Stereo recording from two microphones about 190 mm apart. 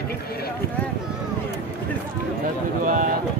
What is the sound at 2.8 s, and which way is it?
Speech, 45° right (ahead or behind).